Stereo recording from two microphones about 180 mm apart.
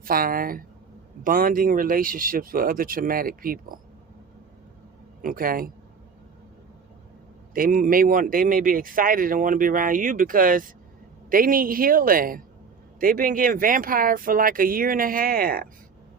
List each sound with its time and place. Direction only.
0.0 s speech: 55° right (ahead or behind)
5.2 s speech: 50° right (ahead or behind)
7.5 s speech: 50° right (ahead or behind)